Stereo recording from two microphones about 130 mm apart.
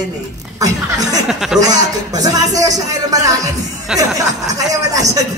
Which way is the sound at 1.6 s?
30° right (ahead or behind).